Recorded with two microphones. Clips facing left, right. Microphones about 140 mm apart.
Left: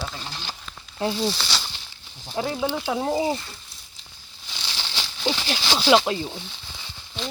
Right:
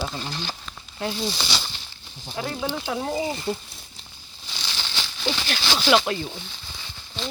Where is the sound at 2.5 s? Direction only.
10° left (ahead or behind).